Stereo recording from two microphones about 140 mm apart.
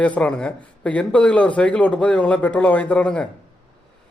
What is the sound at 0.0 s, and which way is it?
Speech, 10° left (ahead or behind).